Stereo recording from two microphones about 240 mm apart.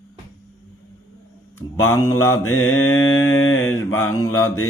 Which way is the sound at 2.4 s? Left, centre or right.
Left.